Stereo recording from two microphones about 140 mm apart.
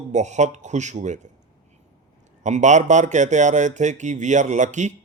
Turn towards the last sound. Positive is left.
turn(degrees=-60)  # may be behind; listen again after turning